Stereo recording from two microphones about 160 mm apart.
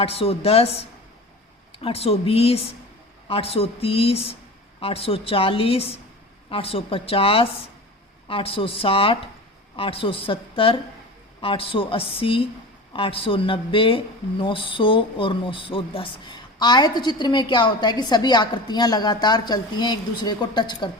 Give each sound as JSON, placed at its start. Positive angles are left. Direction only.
{"t": 0.0, "sound": "a woman's voice", "side_deg": 40}
{"t": 1.8, "sound": "a woman's voice", "side_deg": 40}